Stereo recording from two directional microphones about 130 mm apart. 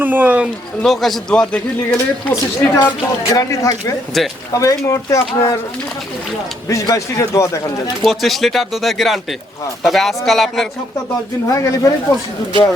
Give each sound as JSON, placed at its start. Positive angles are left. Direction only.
{"t": 0.0, "sound": "speech", "side_deg": -15}
{"t": 0.8, "sound": "a man's voice", "side_deg": 0}
{"t": 2.3, "sound": "speech", "side_deg": 25}
{"t": 4.1, "sound": "a man's voice", "side_deg": 0}
{"t": 4.5, "sound": "speech", "side_deg": 25}
{"t": 6.7, "sound": "speech", "side_deg": 25}
{"t": 8.0, "sound": "a man's voice", "side_deg": 0}
{"t": 11.4, "sound": "speech", "side_deg": 25}